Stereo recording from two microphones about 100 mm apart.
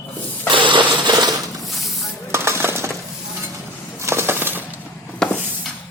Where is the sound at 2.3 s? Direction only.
25° right (ahead or behind).